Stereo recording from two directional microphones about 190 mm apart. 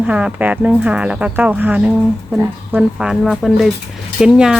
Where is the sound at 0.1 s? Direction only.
5° right (ahead or behind).